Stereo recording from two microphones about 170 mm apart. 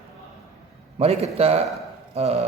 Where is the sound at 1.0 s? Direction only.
40° right (ahead or behind).